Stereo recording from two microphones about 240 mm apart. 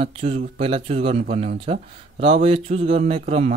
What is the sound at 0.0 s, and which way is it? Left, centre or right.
Speech, right.